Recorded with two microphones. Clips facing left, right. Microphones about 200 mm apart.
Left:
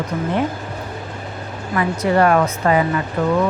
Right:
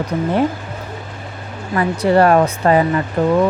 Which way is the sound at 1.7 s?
30° right (ahead or behind).